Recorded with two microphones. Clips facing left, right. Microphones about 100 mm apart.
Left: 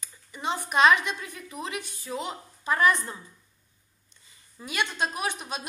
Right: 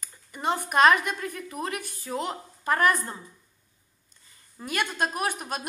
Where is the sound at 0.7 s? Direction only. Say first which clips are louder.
Right 1 dB; 50° right (ahead or behind).